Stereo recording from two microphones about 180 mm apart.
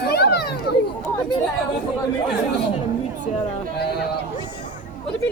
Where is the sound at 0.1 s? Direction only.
65° left (ahead or behind).